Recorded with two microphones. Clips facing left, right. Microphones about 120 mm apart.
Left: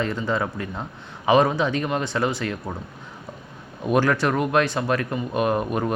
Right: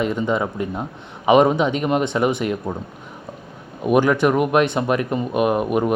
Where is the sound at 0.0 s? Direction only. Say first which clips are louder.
Right 4 dB; 15° right (ahead or behind).